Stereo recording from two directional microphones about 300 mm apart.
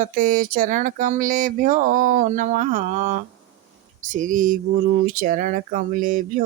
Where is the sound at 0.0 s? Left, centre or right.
Right.